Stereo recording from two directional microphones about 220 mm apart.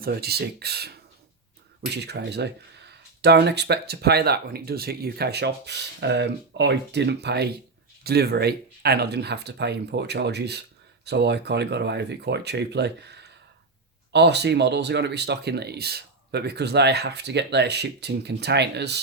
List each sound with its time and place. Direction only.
0.0 s speech: 45° right (ahead or behind)
2.0 s speech: 50° right (ahead or behind)